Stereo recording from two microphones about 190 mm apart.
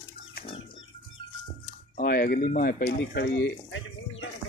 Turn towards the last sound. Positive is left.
turn(degrees=70)  # may be behind; listen again after turning